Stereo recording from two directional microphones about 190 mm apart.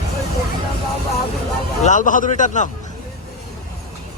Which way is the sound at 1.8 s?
40° left (ahead or behind).